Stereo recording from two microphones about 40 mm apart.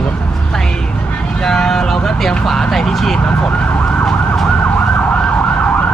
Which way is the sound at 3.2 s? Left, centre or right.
Left.